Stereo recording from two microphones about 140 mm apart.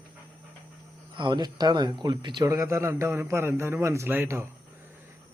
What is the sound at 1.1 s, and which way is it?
Speech, 30° right (ahead or behind).